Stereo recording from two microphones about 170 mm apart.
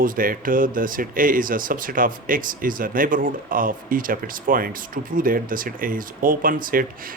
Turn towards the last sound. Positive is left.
turn(degrees=-55)  # may be behind; listen again after turning